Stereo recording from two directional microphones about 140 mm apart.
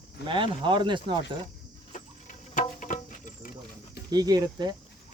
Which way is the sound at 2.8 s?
70° left (ahead or behind).